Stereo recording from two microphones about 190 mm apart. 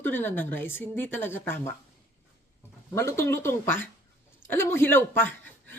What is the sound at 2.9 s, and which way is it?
Speech, 15° left (ahead or behind).